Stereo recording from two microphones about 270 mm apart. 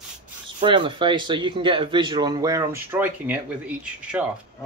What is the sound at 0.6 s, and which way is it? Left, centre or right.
Speech, centre.